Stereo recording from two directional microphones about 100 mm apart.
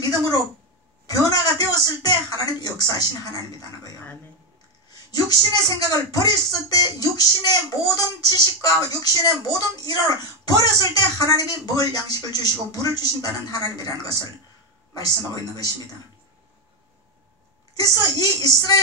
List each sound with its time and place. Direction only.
0.0 s speech: 40° left (ahead or behind)
5.6 s speech: 40° left (ahead or behind)
18.2 s speech: 40° left (ahead or behind)